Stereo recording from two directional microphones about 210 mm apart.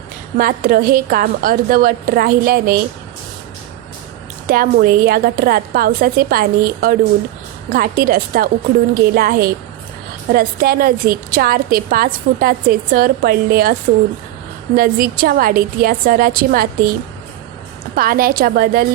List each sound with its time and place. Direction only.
0.3 s a woman's voice: 40° right (ahead or behind)
4.4 s a woman's voice: 45° right (ahead or behind)
14.8 s a woman's voice: 45° right (ahead or behind)
17.9 s a woman's voice: 45° right (ahead or behind)